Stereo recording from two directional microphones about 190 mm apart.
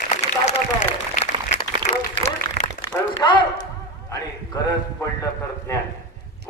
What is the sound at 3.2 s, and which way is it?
A man's voice, 25° left (ahead or behind).